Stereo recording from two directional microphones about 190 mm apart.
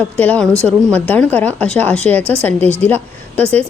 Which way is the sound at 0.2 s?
10° left (ahead or behind).